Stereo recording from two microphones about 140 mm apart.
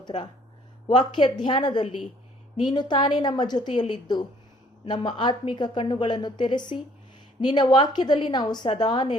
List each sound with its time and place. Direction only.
0.0 s a woman's voice: 35° left (ahead or behind)